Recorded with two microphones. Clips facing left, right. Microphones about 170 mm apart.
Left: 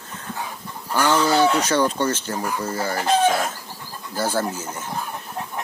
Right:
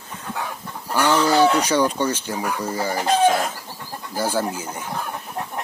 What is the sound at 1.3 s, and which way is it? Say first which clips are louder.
Speech: right 1 dB; 10° right (ahead or behind).